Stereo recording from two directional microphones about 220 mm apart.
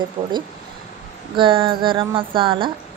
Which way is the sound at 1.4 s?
25° right (ahead or behind).